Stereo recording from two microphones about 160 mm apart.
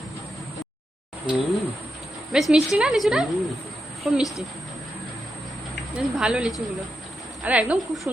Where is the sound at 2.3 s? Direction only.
5° right (ahead or behind).